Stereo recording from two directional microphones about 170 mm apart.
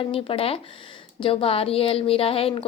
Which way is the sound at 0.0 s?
30° left (ahead or behind).